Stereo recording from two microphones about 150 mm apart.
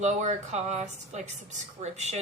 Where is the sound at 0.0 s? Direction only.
50° right (ahead or behind).